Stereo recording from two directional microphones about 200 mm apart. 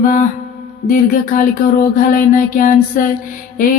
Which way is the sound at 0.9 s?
45° left (ahead or behind).